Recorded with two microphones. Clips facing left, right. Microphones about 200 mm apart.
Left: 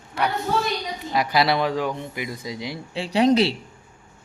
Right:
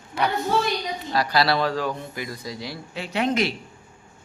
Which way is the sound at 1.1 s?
20° left (ahead or behind).